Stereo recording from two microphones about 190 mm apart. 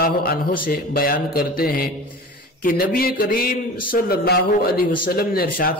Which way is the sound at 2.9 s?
50° left (ahead or behind).